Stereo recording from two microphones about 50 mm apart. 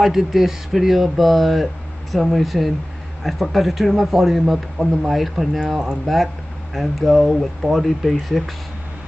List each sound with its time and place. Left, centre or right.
0.0 s speech: centre